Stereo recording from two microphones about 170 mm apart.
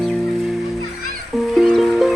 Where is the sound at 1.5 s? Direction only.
Centre (ahead or behind).